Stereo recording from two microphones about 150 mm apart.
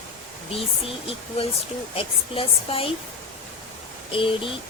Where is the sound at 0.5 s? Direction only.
40° left (ahead or behind).